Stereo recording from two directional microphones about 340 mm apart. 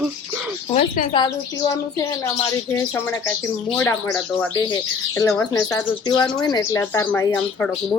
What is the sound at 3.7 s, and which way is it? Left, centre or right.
Speech, centre.